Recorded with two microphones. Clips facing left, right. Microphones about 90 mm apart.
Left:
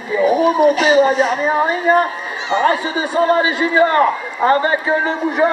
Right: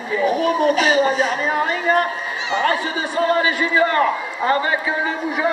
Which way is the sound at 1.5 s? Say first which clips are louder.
Left 4 dB; 20° left (ahead or behind).